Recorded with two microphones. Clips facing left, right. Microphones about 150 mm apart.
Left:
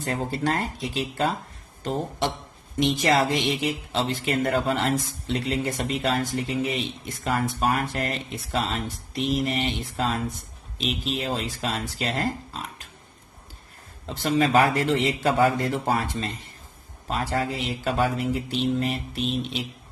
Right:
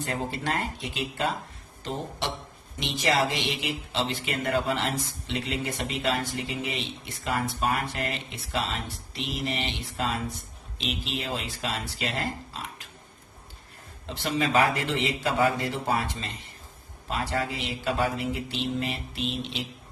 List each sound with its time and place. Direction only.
0.0 s speech: 40° left (ahead or behind)
1.8 s speech: 50° left (ahead or behind)
14.1 s speech: 40° left (ahead or behind)